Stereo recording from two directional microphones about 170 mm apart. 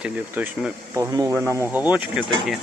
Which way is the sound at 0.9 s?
20° right (ahead or behind).